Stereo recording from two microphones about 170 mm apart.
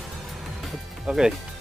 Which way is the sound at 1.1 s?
5° right (ahead or behind).